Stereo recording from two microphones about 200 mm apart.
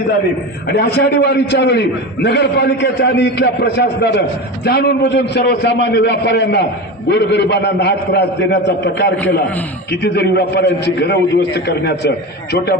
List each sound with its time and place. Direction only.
0.7 s a man's voice: 55° left (ahead or behind)